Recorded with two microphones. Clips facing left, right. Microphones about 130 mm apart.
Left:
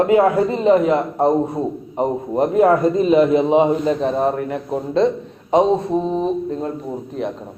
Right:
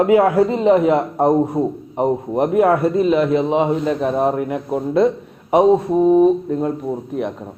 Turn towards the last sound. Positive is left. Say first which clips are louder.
# right 2 dB
turn(degrees=-10)  # may be behind; listen again after turning